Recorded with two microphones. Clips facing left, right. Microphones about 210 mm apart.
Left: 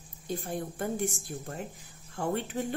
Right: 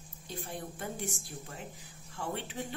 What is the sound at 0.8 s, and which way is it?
A woman's voice, 50° left (ahead or behind).